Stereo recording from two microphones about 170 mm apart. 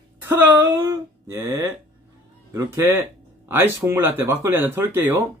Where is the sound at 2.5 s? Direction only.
15° right (ahead or behind).